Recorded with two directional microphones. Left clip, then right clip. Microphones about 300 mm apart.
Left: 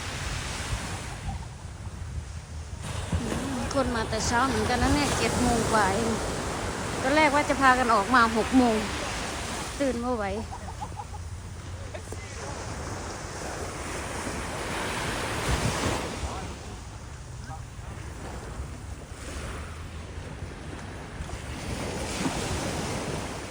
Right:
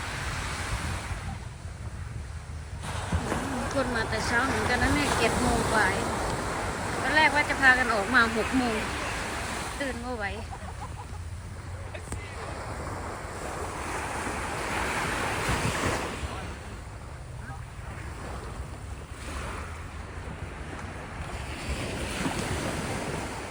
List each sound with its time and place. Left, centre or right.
0.1 s pink noise: centre
2.8 s speech: centre
6.3 s a sound: centre
7.1 s speech: centre
13.8 s waves: centre
19.3 s waves: centre
21.5 s vehicle: left
22.1 s waves: centre